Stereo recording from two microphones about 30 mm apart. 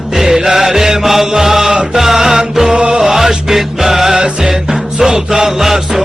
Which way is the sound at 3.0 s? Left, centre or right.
Centre.